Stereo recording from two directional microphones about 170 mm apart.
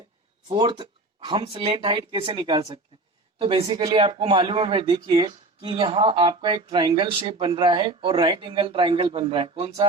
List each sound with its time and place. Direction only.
0.4 s speech: 30° right (ahead or behind)